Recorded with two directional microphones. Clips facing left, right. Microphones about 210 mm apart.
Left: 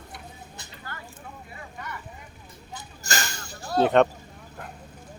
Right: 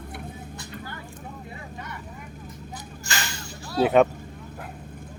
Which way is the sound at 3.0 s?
45° left (ahead or behind).